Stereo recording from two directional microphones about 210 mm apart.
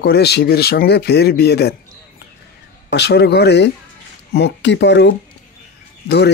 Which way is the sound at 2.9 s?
50° left (ahead or behind).